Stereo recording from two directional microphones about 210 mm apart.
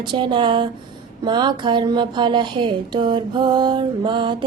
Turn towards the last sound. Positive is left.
turn(degrees=-25)  # may be behind; listen again after turning